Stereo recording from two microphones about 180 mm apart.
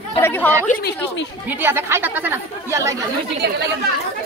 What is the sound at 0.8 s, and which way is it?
Speech, 90° left.